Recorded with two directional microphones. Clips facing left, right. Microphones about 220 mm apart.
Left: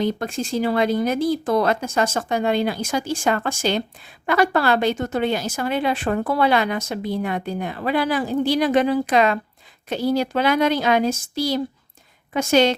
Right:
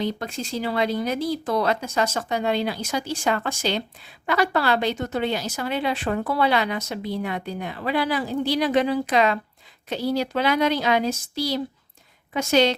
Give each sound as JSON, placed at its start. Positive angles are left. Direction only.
{"t": 0.0, "sound": "speech", "side_deg": 50}